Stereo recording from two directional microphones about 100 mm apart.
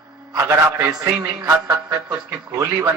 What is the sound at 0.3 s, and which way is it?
Speech, 25° right (ahead or behind).